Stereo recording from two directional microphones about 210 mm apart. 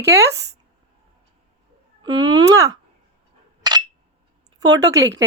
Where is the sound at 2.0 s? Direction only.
20° right (ahead or behind).